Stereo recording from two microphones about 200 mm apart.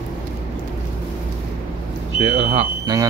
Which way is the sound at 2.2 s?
30° right (ahead or behind).